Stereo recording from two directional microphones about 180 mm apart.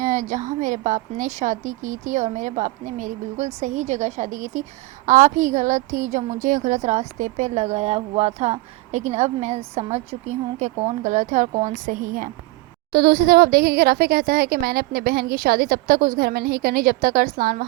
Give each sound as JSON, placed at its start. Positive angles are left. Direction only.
{"t": 0.0, "sound": "a woman's voice", "side_deg": -45}
{"t": 12.9, "sound": "speech", "side_deg": -60}